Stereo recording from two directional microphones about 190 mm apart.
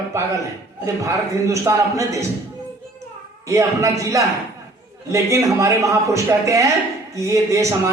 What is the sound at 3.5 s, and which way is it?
A man's voice, 15° right (ahead or behind).